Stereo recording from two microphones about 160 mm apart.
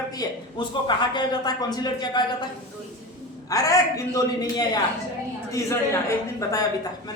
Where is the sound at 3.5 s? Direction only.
20° left (ahead or behind).